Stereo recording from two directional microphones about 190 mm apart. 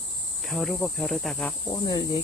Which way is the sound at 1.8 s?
20° left (ahead or behind).